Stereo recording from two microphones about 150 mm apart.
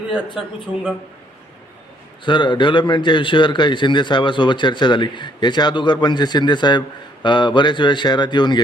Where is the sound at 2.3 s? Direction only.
30° left (ahead or behind).